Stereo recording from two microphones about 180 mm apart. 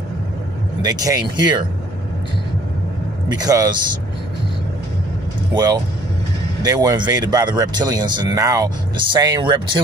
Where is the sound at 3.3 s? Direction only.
20° right (ahead or behind).